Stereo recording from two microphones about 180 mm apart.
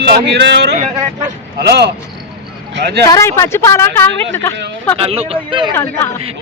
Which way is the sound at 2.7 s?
70° right (ahead or behind).